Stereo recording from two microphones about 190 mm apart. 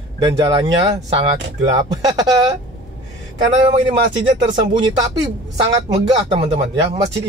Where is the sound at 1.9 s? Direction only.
20° right (ahead or behind).